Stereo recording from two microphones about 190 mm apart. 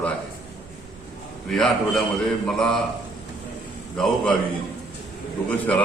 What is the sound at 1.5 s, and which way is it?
A man's voice, centre (ahead or behind).